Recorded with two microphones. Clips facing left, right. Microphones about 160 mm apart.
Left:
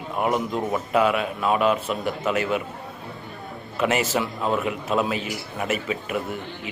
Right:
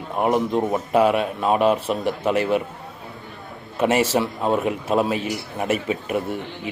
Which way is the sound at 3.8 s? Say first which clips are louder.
Right 4 dB; 35° right (ahead or behind).